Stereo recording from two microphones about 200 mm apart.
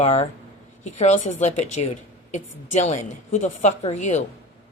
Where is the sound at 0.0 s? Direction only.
30° left (ahead or behind).